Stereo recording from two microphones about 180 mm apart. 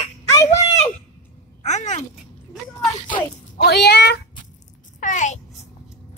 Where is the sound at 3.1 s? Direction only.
45° left (ahead or behind).